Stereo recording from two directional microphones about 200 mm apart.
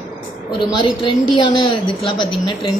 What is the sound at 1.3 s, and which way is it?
A woman's voice, 25° left (ahead or behind).